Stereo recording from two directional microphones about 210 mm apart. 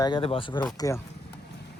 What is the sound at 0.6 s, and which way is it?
Speech, 15° left (ahead or behind).